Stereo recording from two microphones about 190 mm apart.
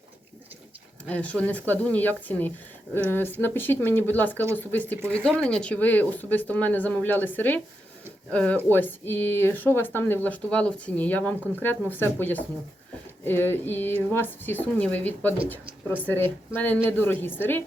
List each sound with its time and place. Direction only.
1.0 s speech: 5° left (ahead or behind)